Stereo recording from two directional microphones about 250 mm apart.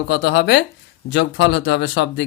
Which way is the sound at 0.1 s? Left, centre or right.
Left.